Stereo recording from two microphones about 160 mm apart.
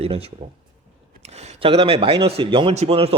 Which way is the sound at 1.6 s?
35° right (ahead or behind).